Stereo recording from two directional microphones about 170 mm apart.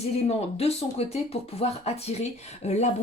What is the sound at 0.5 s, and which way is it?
Speech, 35° left (ahead or behind).